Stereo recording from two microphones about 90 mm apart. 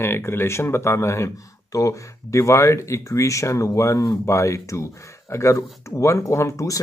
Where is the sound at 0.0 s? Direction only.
30° left (ahead or behind).